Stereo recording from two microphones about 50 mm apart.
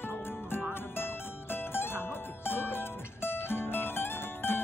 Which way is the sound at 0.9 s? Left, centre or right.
Left.